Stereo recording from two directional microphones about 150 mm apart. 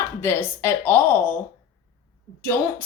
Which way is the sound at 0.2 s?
15° left (ahead or behind).